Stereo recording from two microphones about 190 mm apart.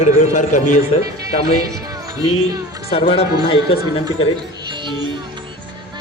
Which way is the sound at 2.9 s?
30° left (ahead or behind).